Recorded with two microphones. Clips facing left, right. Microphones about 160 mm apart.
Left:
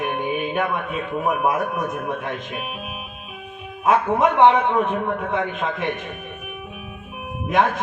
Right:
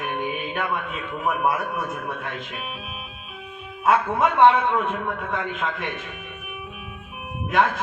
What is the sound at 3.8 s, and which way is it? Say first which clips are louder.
A man's voice: left 2 dB; 20° left (ahead or behind).